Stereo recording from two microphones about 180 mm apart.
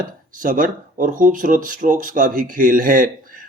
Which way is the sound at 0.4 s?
50° right (ahead or behind).